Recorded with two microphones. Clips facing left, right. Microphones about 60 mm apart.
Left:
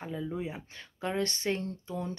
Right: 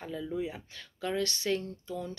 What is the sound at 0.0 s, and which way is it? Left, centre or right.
Speech, left.